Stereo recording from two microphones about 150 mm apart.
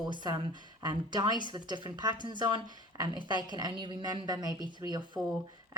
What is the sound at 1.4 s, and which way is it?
A woman's voice, 30° right (ahead or behind).